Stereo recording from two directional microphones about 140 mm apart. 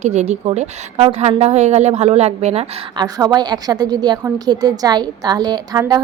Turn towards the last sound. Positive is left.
turn(degrees=-30)  # may be behind; listen again after turning